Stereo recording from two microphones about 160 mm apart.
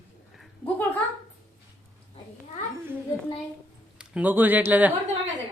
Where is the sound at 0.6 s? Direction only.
10° left (ahead or behind).